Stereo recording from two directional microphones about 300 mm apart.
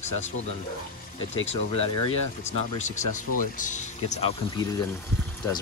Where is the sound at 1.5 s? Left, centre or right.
Centre.